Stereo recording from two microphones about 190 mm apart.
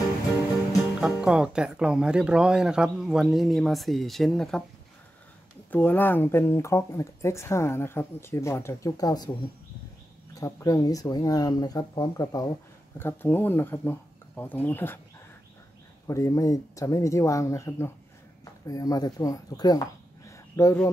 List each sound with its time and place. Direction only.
1.0 s speech: 5° right (ahead or behind)
5.7 s speech: 10° left (ahead or behind)
16.1 s speech: 15° left (ahead or behind)
20.2 s a sound: 15° left (ahead or behind)